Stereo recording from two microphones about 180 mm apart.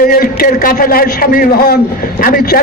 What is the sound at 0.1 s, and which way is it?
A man's voice, 55° left (ahead or behind).